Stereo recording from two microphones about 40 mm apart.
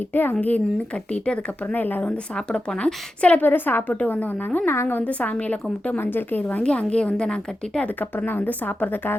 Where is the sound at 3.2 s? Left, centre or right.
Left.